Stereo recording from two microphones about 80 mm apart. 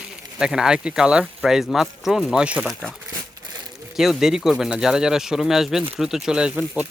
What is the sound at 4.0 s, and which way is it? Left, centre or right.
Speech, centre.